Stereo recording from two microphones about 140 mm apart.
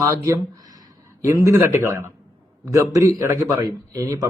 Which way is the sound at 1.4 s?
20° right (ahead or behind).